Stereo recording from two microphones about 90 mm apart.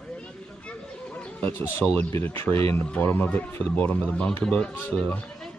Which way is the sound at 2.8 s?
15° left (ahead or behind).